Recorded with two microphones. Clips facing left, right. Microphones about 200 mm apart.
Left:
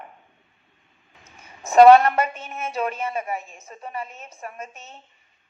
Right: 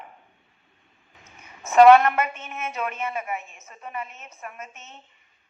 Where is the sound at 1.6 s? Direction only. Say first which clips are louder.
Left 2 dB; 35° left (ahead or behind).